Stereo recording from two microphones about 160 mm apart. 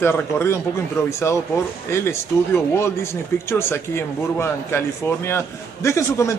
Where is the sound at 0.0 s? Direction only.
15° left (ahead or behind).